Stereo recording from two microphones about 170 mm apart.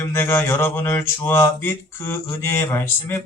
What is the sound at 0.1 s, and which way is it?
Speech, 15° left (ahead or behind).